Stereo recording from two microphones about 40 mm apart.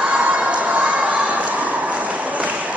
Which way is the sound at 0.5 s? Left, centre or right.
Right.